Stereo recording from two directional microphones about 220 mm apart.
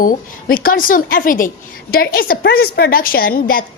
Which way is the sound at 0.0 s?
40° left (ahead or behind).